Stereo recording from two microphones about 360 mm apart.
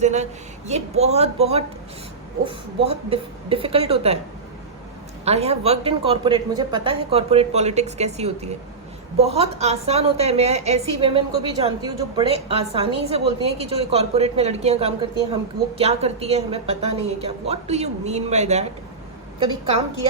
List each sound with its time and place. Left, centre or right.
0.0 s a woman's voice: centre
5.2 s a woman's voice: centre